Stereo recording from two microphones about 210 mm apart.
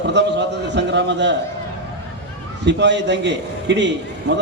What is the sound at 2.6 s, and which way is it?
A man's voice, 55° right (ahead or behind).